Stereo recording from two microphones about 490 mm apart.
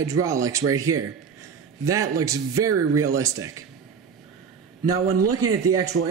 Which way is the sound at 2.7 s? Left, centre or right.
Right.